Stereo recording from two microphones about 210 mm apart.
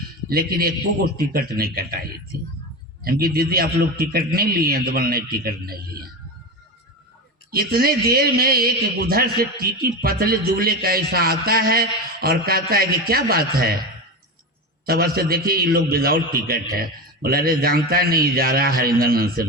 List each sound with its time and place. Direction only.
0.3 s a man's voice: 45° right (ahead or behind)
3.0 s a man's voice: 45° right (ahead or behind)
7.5 s a man's voice: 45° right (ahead or behind)
14.8 s a man's voice: 45° right (ahead or behind)